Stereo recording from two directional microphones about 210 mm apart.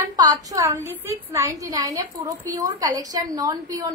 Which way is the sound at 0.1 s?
15° right (ahead or behind).